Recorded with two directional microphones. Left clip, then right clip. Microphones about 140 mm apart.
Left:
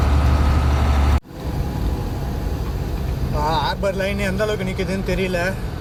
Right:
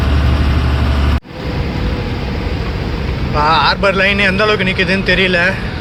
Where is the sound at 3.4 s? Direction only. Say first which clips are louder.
Right 10 dB; centre (ahead or behind).